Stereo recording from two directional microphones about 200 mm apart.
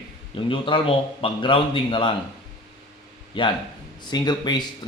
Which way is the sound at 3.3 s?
25° left (ahead or behind).